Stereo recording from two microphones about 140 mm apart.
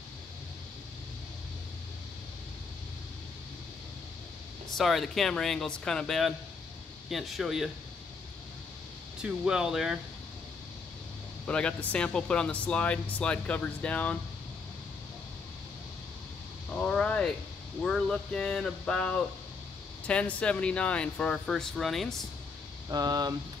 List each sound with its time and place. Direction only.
4.6 s speech: centre (ahead or behind)
9.2 s speech: 5° right (ahead or behind)
11.4 s speech: 10° left (ahead or behind)
16.7 s a sound: 5° left (ahead or behind)
17.8 s speech: 5° left (ahead or behind)
22.8 s speech: 30° right (ahead or behind)